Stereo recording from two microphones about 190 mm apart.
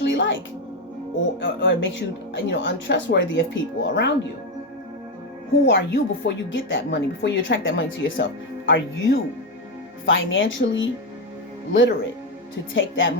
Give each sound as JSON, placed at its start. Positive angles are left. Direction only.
{"t": 0.0, "sound": "music", "side_deg": 75}
{"t": 1.4, "sound": "a woman's voice", "side_deg": 70}
{"t": 5.6, "sound": "a woman's voice", "side_deg": 65}